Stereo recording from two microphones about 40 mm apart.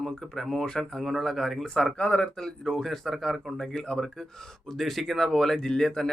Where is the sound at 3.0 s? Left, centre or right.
Centre.